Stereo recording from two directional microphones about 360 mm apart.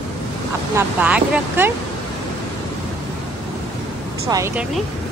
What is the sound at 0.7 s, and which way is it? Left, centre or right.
Speech, centre.